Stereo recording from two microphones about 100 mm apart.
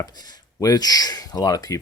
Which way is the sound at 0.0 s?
40° left (ahead or behind).